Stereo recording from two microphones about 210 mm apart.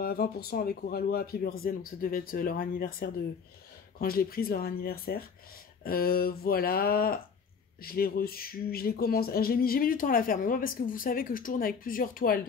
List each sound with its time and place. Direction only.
0.0 s speech: 45° left (ahead or behind)